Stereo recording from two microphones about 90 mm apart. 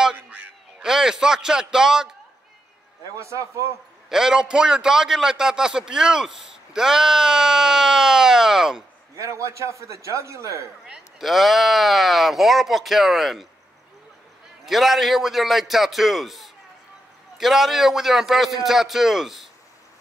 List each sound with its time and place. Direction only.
0.0 s a sound: 10° right (ahead or behind)
3.2 s a man's voice: 35° right (ahead or behind)
4.1 s a man's voice: 5° right (ahead or behind)
9.1 s a man's voice: 35° right (ahead or behind)
10.9 s speech: centre (ahead or behind)
14.7 s speech: centre (ahead or behind)